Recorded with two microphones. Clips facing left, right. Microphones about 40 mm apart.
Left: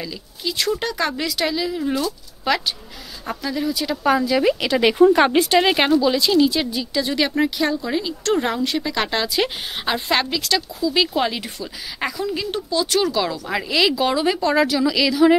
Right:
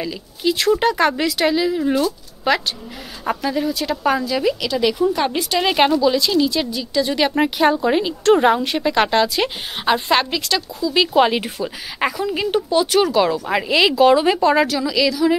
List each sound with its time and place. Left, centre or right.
0.0 s speech: centre
3.3 s speech: centre
4.2 s speech: centre
4.9 s speech: left
5.6 s speech: centre
7.3 s speech: right; by 11.1 s centre
11.1 s speech: right
14.7 s speech: centre